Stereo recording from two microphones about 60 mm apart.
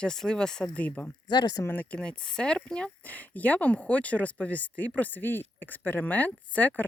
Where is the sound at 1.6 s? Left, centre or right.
Left.